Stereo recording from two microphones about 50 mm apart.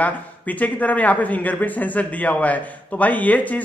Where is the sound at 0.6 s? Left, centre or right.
Left.